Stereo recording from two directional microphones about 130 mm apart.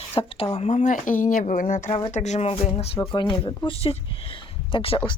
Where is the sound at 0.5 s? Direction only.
60° left (ahead or behind); by 1.9 s 85° left.